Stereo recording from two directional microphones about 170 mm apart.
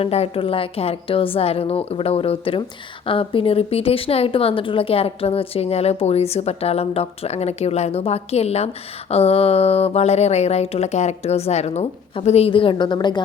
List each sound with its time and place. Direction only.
0.0 s speech: 35° left (ahead or behind)